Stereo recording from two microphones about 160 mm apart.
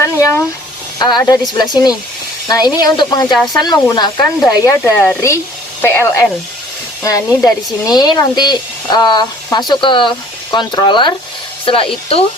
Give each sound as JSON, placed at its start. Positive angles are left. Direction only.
{"t": 0.0, "sound": "speech", "side_deg": 20}
{"t": 4.8, "sound": "speech", "side_deg": 10}